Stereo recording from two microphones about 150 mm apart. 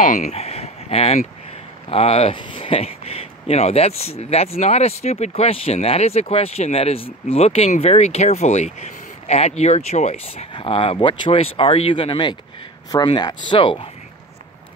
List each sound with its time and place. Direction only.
0.0 s speech: 55° left (ahead or behind); by 13.8 s 35° left (ahead or behind)